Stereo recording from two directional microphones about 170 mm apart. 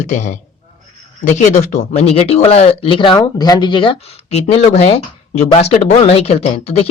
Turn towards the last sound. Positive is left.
turn(degrees=35)  # may be behind; listen again after turning